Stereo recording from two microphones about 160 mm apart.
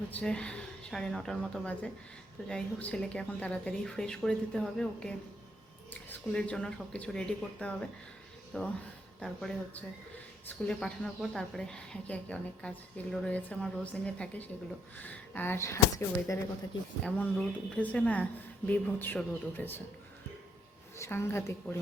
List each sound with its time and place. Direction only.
0.1 s a woman's voice: 5° left (ahead or behind)
21.0 s a woman's voice: 15° left (ahead or behind)